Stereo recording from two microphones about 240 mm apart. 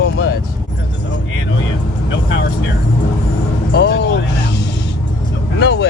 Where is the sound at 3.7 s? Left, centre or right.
Left.